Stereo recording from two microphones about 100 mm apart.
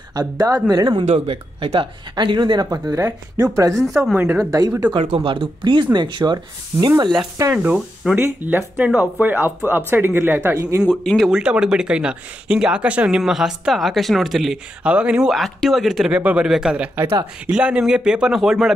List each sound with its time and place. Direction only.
0.1 s speech: 40° right (ahead or behind)
1.1 s speech: 70° right (ahead or behind); by 4.8 s 35° right (ahead or behind)
4.9 s speech: 65° right (ahead or behind); by 6.9 s 45° right (ahead or behind)
7.5 s speech: 15° right (ahead or behind)
10.9 s speech: 10° left (ahead or behind)
11.2 s speech: 10° right (ahead or behind)
15.3 s speech: centre (ahead or behind)
16.2 s speech: 15° right (ahead or behind)
16.4 s speech: 5° right (ahead or behind)